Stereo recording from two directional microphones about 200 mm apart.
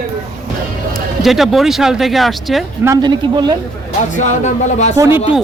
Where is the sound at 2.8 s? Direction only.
20° right (ahead or behind).